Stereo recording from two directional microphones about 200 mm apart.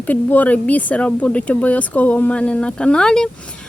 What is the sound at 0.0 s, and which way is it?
Speech, 10° left (ahead or behind).